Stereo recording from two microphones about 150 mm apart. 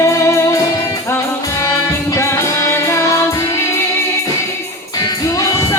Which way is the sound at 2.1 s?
20° left (ahead or behind).